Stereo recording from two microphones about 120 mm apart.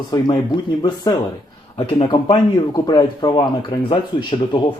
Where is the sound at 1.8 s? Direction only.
45° left (ahead or behind).